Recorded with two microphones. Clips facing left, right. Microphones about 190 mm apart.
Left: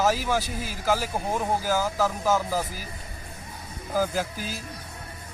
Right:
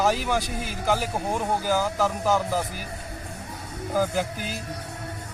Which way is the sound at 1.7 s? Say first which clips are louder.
Right 2 dB; 5° left (ahead or behind).